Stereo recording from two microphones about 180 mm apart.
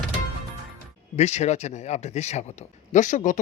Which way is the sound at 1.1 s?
35° left (ahead or behind).